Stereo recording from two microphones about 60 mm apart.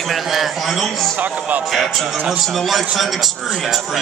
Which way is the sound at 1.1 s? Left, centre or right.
Right.